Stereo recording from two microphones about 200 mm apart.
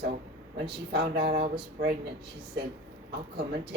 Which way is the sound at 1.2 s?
30° right (ahead or behind).